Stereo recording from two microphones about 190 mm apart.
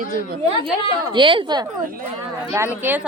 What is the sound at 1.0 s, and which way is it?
Speech, 25° right (ahead or behind).